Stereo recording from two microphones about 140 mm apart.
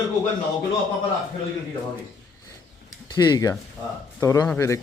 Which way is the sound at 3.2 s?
30° left (ahead or behind).